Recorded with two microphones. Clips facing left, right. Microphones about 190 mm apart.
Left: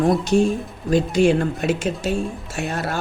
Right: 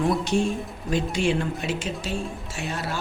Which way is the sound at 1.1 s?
45° left (ahead or behind).